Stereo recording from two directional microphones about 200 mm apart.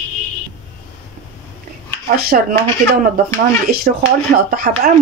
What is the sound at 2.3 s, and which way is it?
Speech, 45° right (ahead or behind).